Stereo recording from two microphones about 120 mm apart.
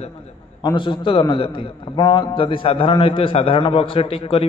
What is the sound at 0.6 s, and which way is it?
A man's voice, 45° left (ahead or behind).